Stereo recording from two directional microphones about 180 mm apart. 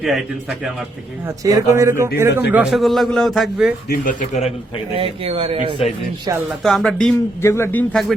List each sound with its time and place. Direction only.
1.5 s a man's voice: 20° right (ahead or behind); by 3.8 s centre (ahead or behind)
3.8 s speech: 50° left (ahead or behind)
4.9 s speech: 30° right (ahead or behind)
6.6 s a man's voice: centre (ahead or behind)
7.4 s a man's voice: 15° left (ahead or behind)